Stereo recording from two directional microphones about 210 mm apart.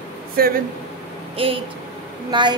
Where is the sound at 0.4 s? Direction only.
45° right (ahead or behind).